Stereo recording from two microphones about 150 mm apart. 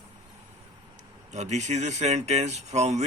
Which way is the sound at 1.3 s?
50° right (ahead or behind).